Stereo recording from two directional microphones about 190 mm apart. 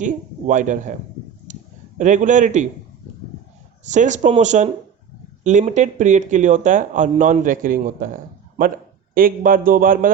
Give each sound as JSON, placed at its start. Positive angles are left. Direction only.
{"t": 0.0, "sound": "speech", "side_deg": -40}
{"t": 1.5, "sound": "a sound", "side_deg": -40}
{"t": 2.0, "sound": "speech", "side_deg": -40}
{"t": 3.8, "sound": "a man's voice", "side_deg": -40}